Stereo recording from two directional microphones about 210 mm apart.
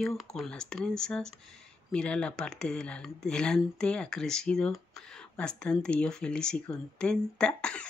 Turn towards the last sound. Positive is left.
turn(degrees=5)  # may be behind; listen again after turning